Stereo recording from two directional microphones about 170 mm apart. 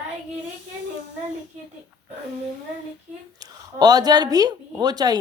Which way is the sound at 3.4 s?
25° right (ahead or behind).